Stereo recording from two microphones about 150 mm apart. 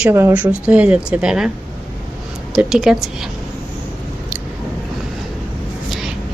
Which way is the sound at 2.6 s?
5° right (ahead or behind).